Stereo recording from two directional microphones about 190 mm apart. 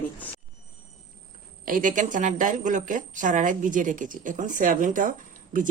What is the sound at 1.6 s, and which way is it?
A woman's voice, 45° right (ahead or behind).